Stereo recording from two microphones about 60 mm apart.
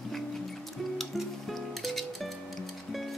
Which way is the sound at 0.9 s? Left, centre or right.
Centre.